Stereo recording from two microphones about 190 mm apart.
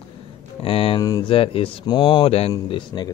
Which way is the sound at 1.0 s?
20° left (ahead or behind).